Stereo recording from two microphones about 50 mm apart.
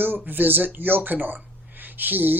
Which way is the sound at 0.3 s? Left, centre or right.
Right.